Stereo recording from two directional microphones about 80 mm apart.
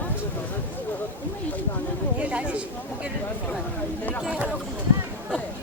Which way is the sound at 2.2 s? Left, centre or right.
Centre.